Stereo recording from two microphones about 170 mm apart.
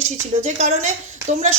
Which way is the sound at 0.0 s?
45° right (ahead or behind).